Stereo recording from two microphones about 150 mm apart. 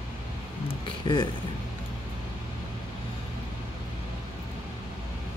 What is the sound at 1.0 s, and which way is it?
Speech, 30° left (ahead or behind).